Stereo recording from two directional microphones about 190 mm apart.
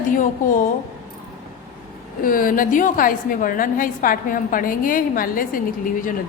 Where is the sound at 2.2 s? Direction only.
45° left (ahead or behind).